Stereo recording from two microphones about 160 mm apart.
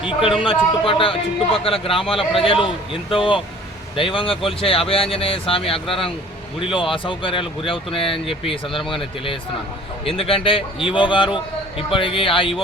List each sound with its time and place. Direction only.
0.0 s speech: 5° right (ahead or behind)
0.4 s speech: 35° left (ahead or behind)